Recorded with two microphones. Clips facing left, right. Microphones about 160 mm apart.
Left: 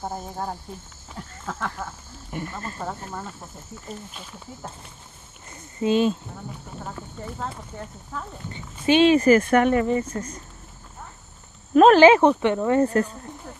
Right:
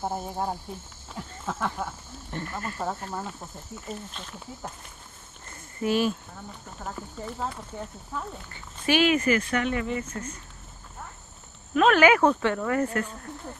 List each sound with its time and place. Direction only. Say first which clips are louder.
0.0 s speech: right 1 dB; 5° right (ahead or behind)
2.3 s speech: left 2 dB; 15° left (ahead or behind)
2.8 s speech: right 2 dB; 5° right (ahead or behind)
4.1 s speech: even; 5° left (ahead or behind)
5.5 s a sound: left 4 dB; 20° left (ahead or behind)
6.8 s speech: right 1 dB; 5° right (ahead or behind)
8.5 s speech: left 6 dB; 20° left (ahead or behind)
11.7 s speech: left 7 dB; 35° left (ahead or behind)